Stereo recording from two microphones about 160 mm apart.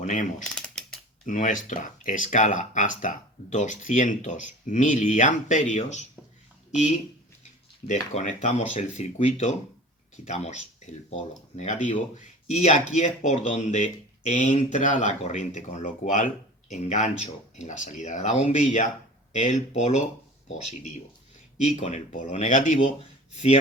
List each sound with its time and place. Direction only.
0.0 s speech: 55° left (ahead or behind)
0.4 s mechanisms: centre (ahead or behind)
1.2 s speech: 55° left (ahead or behind)
8.1 s speech: 50° left (ahead or behind)
11.1 s speech: 45° left (ahead or behind)
21.6 s speech: 45° left (ahead or behind)